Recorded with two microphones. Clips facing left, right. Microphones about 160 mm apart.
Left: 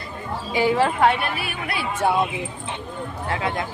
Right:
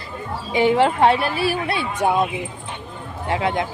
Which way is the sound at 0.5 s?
25° right (ahead or behind).